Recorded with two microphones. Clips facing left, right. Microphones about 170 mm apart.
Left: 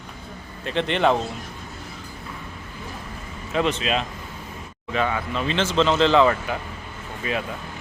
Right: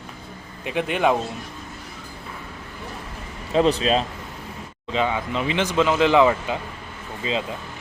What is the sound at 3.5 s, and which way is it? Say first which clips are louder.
Speech: right 4 dB; 35° right (ahead or behind).